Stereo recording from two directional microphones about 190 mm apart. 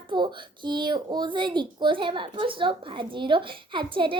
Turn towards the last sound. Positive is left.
turn(degrees=-25)  # may be behind; listen again after turning